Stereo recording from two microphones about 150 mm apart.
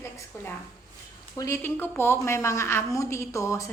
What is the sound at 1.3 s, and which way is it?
A woman's voice, 20° left (ahead or behind).